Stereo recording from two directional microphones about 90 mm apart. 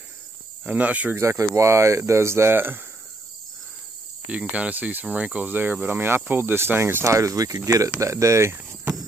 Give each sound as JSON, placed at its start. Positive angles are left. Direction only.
{"t": 0.7, "sound": "speech", "side_deg": -15}
{"t": 1.1, "sound": "speech", "side_deg": -35}
{"t": 4.3, "sound": "speech", "side_deg": -15}